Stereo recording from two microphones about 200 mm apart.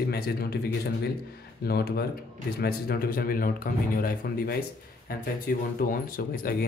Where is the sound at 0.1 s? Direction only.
55° left (ahead or behind).